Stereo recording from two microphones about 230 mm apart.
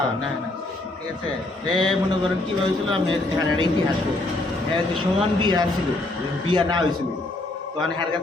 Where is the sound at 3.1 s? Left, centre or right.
Centre.